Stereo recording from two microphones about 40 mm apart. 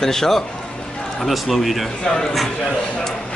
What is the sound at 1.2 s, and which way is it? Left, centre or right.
Speech, centre.